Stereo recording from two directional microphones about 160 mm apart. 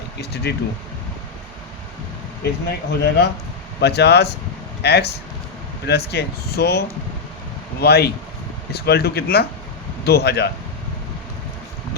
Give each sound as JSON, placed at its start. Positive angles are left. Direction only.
{"t": 0.5, "sound": "speech", "side_deg": 90}
{"t": 2.4, "sound": "speech", "side_deg": 90}